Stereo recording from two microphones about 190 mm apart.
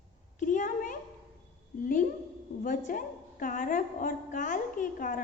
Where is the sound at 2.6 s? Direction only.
45° left (ahead or behind).